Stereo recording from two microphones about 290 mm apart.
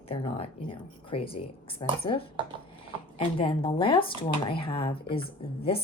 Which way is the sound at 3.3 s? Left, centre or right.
Centre.